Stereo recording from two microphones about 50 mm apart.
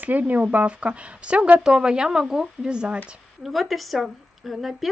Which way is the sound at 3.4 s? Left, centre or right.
Centre.